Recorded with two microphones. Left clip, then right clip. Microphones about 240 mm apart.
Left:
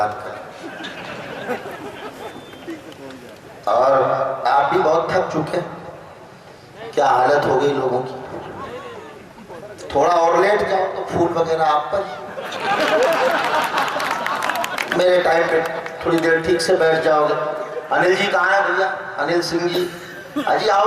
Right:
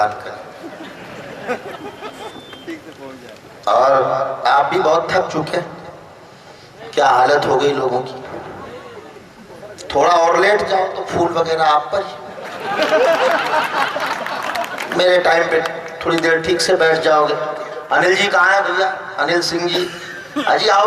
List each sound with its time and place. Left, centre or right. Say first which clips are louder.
3.6 s a man's voice: right 2 dB; centre
4.0 s a man's voice: right 1 dB; centre
4.4 s a man's voice: right 2 dB; centre
6.9 s a man's voice: right 3 dB; centre
9.9 s a man's voice: right 2 dB; centre